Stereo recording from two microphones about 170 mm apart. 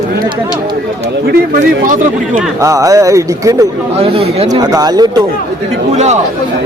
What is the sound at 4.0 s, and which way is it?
Speech, 35° right (ahead or behind).